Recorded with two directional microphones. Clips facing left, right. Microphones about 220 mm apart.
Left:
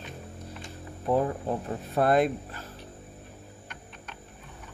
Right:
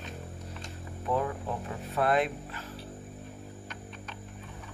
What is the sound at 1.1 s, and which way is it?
Speech, 35° left (ahead or behind).